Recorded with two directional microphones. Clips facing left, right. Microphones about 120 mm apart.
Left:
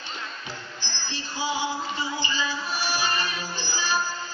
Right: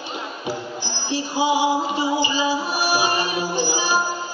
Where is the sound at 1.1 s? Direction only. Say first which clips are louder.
Right 10 dB; 15° right (ahead or behind).